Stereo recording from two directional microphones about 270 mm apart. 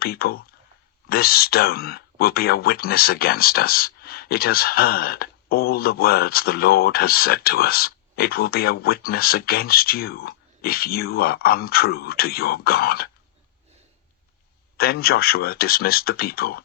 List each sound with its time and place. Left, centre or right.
0.0 s speech: left
14.8 s speech: left